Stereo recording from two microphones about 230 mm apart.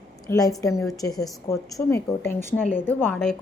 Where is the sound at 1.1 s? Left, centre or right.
Centre.